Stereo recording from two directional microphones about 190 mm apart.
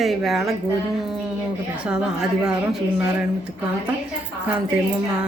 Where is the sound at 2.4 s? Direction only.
5° right (ahead or behind).